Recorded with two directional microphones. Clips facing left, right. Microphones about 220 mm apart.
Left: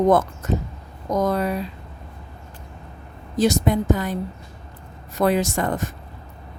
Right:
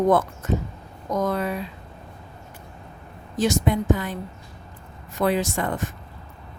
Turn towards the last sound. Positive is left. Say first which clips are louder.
# left 3 dB
turn(degrees=40)  # may be behind; listen again after turning